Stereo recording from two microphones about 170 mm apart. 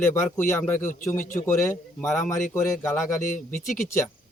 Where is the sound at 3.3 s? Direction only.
50° left (ahead or behind).